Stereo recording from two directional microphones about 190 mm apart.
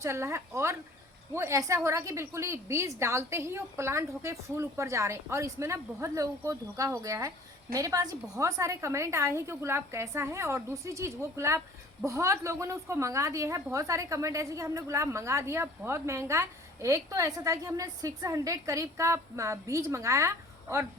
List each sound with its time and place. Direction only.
0.0 s a woman's voice: 15° right (ahead or behind)